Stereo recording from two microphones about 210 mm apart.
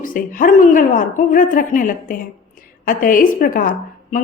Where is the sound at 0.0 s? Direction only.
40° left (ahead or behind).